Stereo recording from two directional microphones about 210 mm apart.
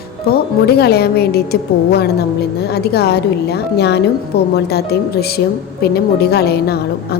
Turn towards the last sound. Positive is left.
turn(degrees=50)  # may be behind; listen again after turning